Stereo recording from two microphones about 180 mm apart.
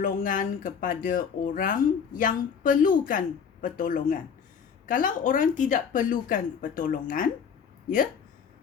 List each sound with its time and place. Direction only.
0.0 s speech: 50° left (ahead or behind)